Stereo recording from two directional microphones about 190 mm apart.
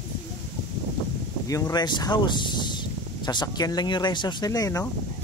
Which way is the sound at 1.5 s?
20° left (ahead or behind).